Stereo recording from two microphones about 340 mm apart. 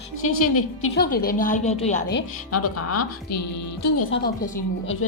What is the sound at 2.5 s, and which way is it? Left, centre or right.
A woman's voice, left.